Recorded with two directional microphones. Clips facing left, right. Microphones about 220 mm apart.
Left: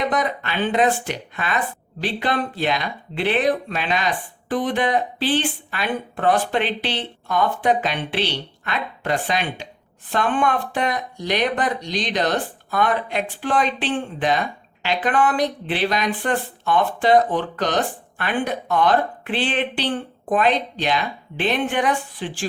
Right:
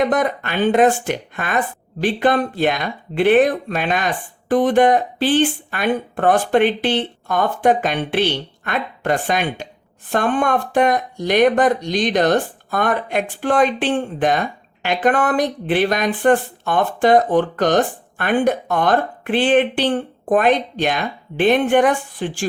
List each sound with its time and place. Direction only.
0.0 s speech: 50° right (ahead or behind)